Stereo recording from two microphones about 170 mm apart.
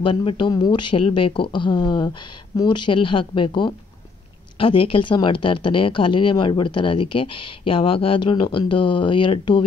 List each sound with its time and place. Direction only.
0.0 s speech: 30° left (ahead or behind)